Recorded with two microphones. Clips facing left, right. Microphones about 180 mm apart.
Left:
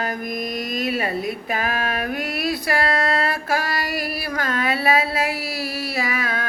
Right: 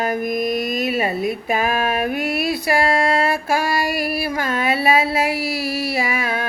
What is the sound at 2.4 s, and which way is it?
Female singing, 25° right (ahead or behind).